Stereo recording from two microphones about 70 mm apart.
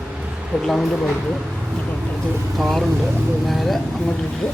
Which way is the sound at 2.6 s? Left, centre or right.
Centre.